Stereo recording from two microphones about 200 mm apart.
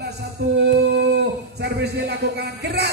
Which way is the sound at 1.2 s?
55° right (ahead or behind).